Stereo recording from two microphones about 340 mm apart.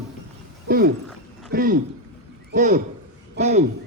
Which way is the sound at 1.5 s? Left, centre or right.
Right.